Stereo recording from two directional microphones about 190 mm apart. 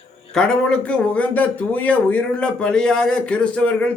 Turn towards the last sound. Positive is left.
turn(degrees=5)  # may be behind; listen again after turning